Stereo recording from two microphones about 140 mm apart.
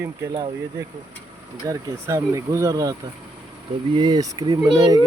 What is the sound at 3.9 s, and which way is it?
Speech, 30° right (ahead or behind).